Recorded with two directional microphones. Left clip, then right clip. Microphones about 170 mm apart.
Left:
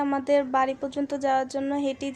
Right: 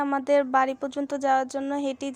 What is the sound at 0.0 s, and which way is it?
A woman's voice, 25° right (ahead or behind).